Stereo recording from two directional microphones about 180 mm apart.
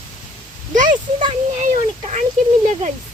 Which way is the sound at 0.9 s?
25° right (ahead or behind).